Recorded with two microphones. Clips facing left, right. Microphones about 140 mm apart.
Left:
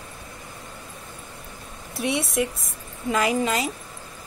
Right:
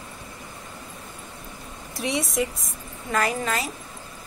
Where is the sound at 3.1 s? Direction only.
15° left (ahead or behind).